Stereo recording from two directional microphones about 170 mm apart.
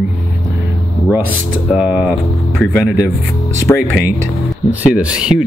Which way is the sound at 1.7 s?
5° right (ahead or behind).